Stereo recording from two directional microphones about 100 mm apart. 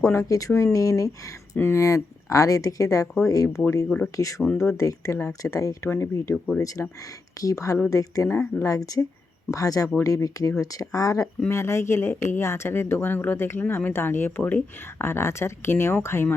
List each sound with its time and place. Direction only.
0.0 s speech: 35° left (ahead or behind)
6.3 s speech: 10° left (ahead or behind)
7.3 s speech: 35° left (ahead or behind)